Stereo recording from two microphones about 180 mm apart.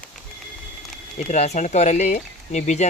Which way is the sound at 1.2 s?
40° left (ahead or behind).